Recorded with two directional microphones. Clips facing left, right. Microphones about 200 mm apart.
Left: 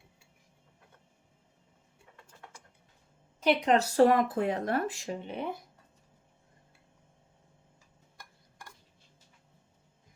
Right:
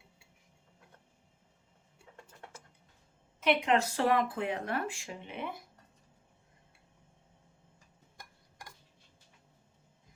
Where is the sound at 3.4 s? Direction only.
35° left (ahead or behind).